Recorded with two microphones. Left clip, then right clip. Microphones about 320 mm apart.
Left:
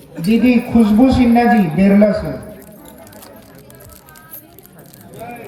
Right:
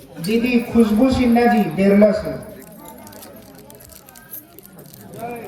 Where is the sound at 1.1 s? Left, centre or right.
Left.